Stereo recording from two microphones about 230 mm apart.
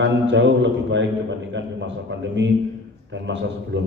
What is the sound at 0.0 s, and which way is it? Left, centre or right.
A man's voice, right.